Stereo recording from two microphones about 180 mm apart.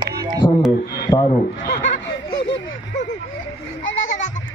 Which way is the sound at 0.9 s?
20° left (ahead or behind).